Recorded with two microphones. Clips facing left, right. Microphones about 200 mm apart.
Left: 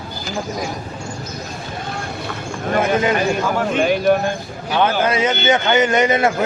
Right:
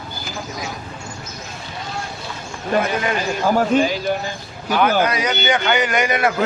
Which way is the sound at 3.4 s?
35° right (ahead or behind).